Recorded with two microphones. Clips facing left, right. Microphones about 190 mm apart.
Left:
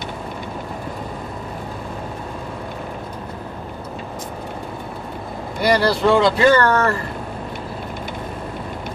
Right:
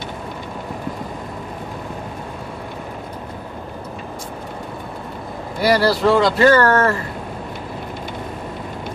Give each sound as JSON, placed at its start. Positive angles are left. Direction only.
{"t": 5.6, "sound": "speech", "side_deg": -5}